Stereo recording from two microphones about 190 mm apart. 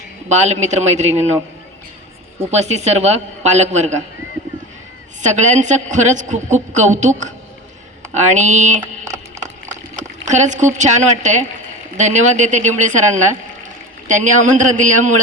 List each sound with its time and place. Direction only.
0.3 s a woman's voice: 35° right (ahead or behind)
2.5 s a woman's voice: 35° right (ahead or behind)
5.2 s a woman's voice: 40° right (ahead or behind)
9.4 s a sound: 40° right (ahead or behind)
10.2 s a woman's voice: 40° right (ahead or behind)